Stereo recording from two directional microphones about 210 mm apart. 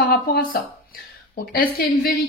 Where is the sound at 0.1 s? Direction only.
45° left (ahead or behind).